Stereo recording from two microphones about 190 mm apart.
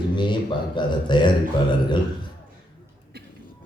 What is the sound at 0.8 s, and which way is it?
Speech, 25° left (ahead or behind).